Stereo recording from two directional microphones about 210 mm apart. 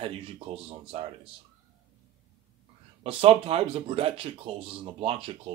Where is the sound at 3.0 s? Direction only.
25° right (ahead or behind).